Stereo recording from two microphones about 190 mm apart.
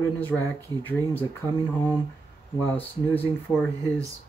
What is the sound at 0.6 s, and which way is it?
Speech, 10° left (ahead or behind).